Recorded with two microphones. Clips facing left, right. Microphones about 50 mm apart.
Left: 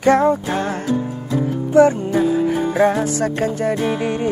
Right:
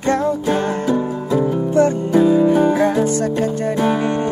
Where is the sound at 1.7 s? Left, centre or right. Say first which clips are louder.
Left 3 dB; centre; by 3.8 s left.